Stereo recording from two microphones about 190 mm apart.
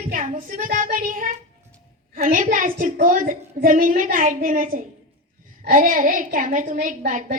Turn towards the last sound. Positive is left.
turn(degrees=-45)  # may be behind; listen again after turning